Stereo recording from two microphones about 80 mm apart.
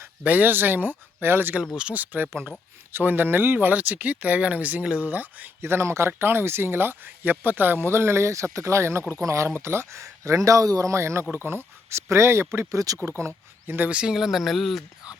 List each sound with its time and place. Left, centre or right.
0.3 s speech: right
1.7 s speech: centre; by 12.5 s right
12.5 s speech: right
13.7 s speech: centre